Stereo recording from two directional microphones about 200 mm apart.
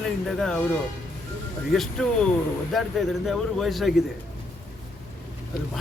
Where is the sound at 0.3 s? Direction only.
5° left (ahead or behind).